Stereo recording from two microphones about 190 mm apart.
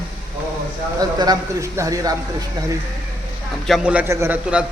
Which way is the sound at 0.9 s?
20° right (ahead or behind).